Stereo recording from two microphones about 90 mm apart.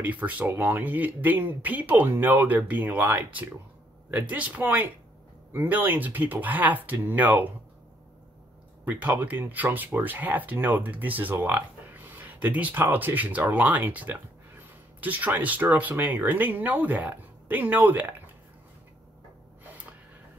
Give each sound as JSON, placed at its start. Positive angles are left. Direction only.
{"t": 0.0, "sound": "speech", "side_deg": -20}
{"t": 8.8, "sound": "speech", "side_deg": -15}
{"t": 19.6, "sound": "gasp", "side_deg": -15}